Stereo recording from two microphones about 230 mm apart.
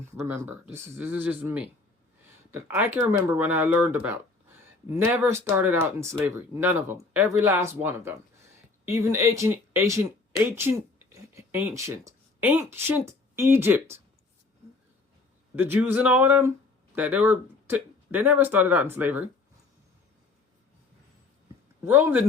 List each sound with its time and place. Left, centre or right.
0.0 s speech: centre
15.5 s speech: centre
21.8 s speech: centre